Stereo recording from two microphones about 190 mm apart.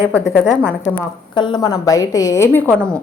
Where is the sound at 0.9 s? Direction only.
25° left (ahead or behind).